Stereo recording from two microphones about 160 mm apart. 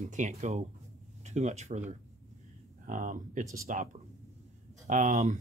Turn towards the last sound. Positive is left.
turn(degrees=-45)  # may be behind; listen again after turning